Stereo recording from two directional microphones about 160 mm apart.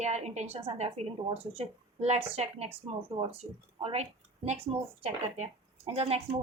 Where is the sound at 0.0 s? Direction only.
45° right (ahead or behind).